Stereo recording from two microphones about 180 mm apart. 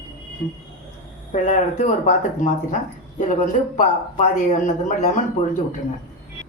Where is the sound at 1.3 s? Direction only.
45° left (ahead or behind).